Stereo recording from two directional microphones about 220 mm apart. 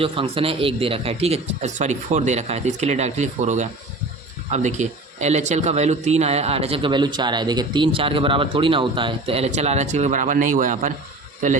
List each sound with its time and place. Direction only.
0.0 s a man's voice: 25° right (ahead or behind)